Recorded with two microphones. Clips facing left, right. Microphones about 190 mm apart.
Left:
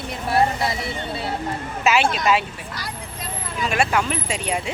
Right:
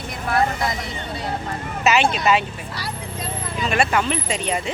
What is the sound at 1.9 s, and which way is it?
Speech, 5° left (ahead or behind).